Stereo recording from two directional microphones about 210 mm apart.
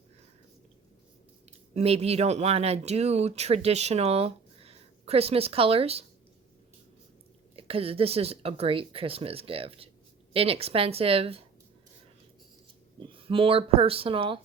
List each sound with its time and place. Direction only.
1.5 s speech: 30° right (ahead or behind)
7.5 s speech: 25° right (ahead or behind)
13.0 s speech: 25° right (ahead or behind)